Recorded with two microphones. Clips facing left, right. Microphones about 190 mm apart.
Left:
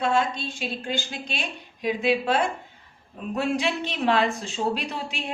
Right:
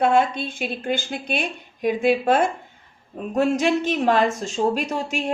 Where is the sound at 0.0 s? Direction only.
55° right (ahead or behind).